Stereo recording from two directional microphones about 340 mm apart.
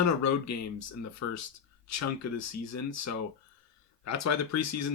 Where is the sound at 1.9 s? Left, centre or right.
Left.